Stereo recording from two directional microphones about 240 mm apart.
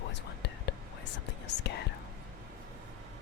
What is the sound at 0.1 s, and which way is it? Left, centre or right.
Whispering, left.